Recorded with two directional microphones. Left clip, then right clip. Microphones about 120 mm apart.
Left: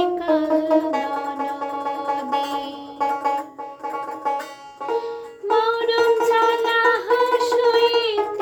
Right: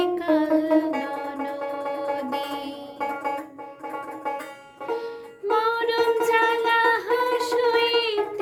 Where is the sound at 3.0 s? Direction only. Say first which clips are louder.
Left 7 dB; 35° right (ahead or behind).